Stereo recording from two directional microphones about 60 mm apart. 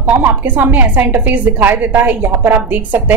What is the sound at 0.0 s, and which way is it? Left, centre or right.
A woman's voice, right.